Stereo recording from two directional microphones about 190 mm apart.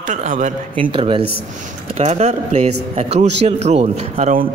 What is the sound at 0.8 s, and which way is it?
A man's voice, 25° right (ahead or behind).